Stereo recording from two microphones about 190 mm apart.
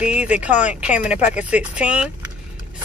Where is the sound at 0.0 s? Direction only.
5° right (ahead or behind).